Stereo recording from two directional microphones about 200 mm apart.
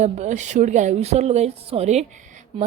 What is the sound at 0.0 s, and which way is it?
Speech, 35° right (ahead or behind).